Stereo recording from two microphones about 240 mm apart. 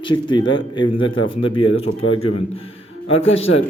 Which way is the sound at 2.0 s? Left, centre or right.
Left.